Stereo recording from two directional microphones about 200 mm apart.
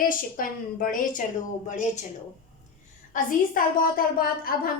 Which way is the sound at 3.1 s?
40° left (ahead or behind).